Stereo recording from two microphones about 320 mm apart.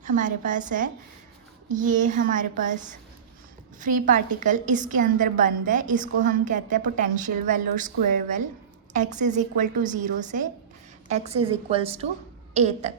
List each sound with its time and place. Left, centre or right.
0.0 s a woman's voice: right
3.8 s a woman's voice: right